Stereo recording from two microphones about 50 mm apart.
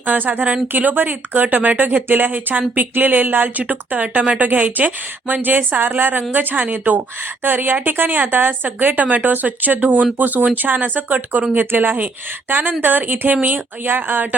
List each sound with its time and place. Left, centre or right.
0.0 s a woman's voice: right
3.6 s a woman's voice: right
11.5 s a woman's voice: right